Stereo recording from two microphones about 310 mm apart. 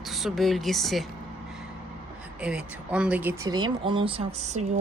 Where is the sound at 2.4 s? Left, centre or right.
Centre.